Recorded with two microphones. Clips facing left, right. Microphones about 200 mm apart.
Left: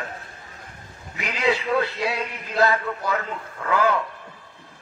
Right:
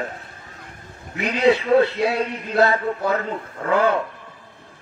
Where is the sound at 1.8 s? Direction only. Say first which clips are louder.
Right 6 dB; 60° right (ahead or behind).